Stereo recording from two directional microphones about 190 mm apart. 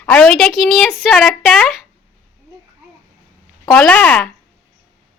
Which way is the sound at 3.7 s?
5° left (ahead or behind).